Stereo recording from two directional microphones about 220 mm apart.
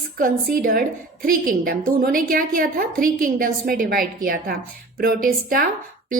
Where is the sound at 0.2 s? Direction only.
40° right (ahead or behind).